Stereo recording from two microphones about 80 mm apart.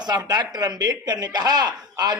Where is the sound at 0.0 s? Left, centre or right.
Right.